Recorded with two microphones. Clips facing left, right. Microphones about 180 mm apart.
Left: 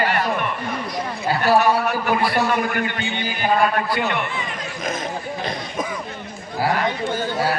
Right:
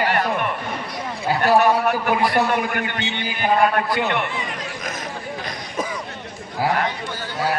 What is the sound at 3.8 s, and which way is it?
Speech, 20° right (ahead or behind).